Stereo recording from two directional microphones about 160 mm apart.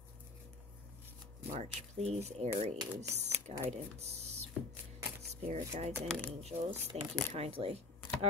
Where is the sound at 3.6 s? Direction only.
40° right (ahead or behind).